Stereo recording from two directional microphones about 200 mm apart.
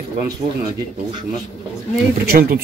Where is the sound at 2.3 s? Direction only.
50° right (ahead or behind).